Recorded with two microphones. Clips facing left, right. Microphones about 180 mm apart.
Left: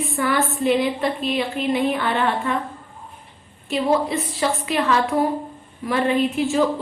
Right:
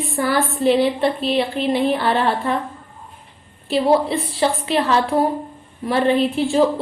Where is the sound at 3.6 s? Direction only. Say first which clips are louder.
Right 3 dB; 30° right (ahead or behind).